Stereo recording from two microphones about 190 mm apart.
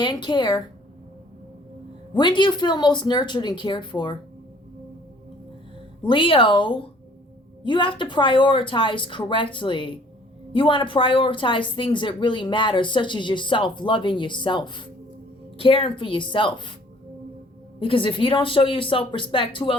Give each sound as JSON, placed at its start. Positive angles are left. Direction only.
{"t": 0.0, "sound": "speech", "side_deg": 25}
{"t": 2.1, "sound": "speech", "side_deg": 25}
{"t": 6.0, "sound": "speech", "side_deg": 25}
{"t": 17.7, "sound": "speech", "side_deg": 25}